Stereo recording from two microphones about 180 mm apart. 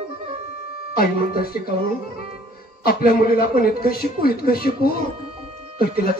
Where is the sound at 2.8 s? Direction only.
55° left (ahead or behind).